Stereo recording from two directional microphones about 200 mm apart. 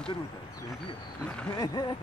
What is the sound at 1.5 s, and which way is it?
Speech, 20° left (ahead or behind).